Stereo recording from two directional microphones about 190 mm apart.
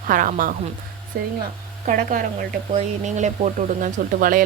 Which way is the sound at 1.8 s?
45° right (ahead or behind).